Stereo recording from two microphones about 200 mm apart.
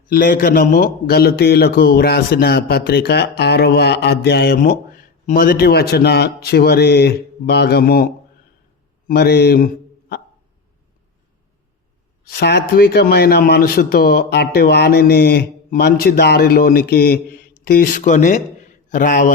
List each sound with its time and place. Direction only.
0.1 s speech: 45° left (ahead or behind)
9.0 s speech: 50° left (ahead or behind)
12.2 s speech: 50° left (ahead or behind)